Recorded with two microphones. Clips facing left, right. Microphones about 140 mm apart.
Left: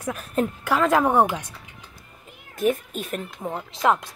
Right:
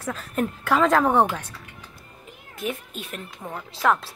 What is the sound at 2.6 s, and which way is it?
Speech, 45° left (ahead or behind).